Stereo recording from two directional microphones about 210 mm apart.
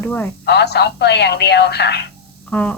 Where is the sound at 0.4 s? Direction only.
50° left (ahead or behind).